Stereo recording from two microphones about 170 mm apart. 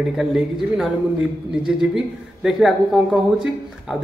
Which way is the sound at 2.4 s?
Centre (ahead or behind).